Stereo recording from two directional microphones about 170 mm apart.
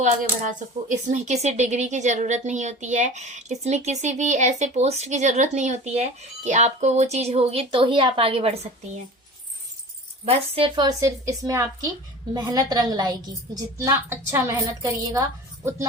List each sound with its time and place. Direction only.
0.0 s speech: 50° right (ahead or behind); by 8.5 s 35° right (ahead or behind)
10.2 s speech: 35° right (ahead or behind)
10.8 s a woman's voice: 20° right (ahead or behind)